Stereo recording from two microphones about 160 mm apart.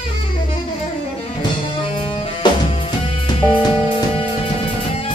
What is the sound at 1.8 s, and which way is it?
Music, 30° left (ahead or behind).